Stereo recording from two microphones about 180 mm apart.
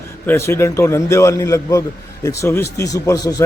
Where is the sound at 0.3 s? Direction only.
15° left (ahead or behind).